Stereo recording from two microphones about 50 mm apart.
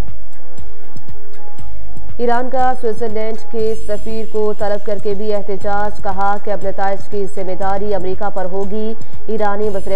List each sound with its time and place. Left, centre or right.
2.1 s a woman's voice: left